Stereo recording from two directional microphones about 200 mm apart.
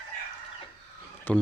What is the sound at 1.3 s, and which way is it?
Speech, 10° left (ahead or behind).